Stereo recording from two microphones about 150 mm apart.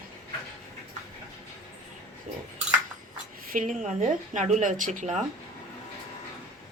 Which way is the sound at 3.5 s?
55° right (ahead or behind).